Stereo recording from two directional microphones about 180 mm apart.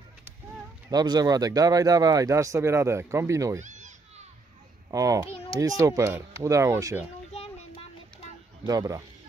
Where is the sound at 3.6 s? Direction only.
40° right (ahead or behind).